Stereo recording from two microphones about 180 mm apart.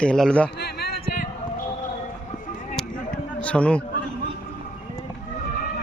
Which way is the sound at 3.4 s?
5° left (ahead or behind).